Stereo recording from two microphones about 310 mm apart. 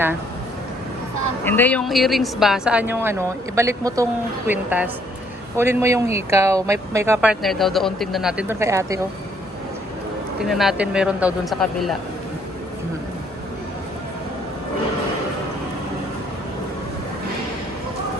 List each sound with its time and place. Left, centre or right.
1.5 s a woman's voice: centre
10.4 s a woman's voice: centre